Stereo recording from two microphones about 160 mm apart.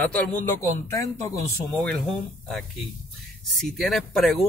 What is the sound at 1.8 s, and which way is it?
Speech, centre (ahead or behind).